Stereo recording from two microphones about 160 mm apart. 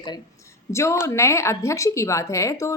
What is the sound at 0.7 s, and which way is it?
A woman's voice, 15° left (ahead or behind).